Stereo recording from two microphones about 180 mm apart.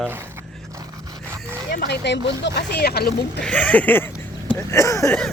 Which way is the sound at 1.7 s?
60° left (ahead or behind).